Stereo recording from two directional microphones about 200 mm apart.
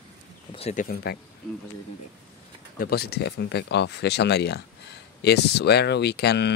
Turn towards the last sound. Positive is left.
turn(degrees=55)  # may be behind; listen again after turning